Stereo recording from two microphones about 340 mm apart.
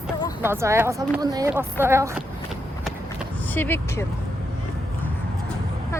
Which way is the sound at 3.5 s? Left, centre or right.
Centre.